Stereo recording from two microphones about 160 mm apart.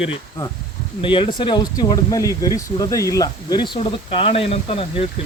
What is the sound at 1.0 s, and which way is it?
Speech, 30° left (ahead or behind).